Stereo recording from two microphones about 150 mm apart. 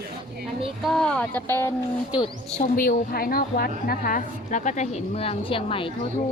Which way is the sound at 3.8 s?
70° left (ahead or behind).